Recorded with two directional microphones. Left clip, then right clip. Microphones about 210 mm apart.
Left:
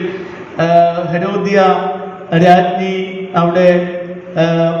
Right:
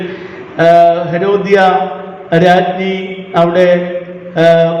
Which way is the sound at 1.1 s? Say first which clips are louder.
Right 3 dB; 40° right (ahead or behind).